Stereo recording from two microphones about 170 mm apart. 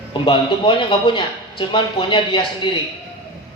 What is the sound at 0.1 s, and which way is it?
A man's voice, 30° left (ahead or behind).